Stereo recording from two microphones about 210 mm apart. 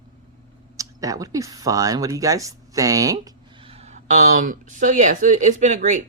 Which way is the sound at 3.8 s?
35° right (ahead or behind).